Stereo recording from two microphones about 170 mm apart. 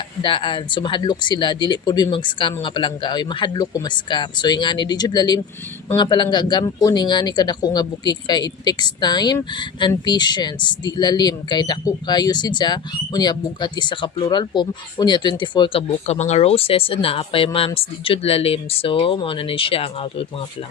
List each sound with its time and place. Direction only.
0.2 s speech: 30° left (ahead or behind)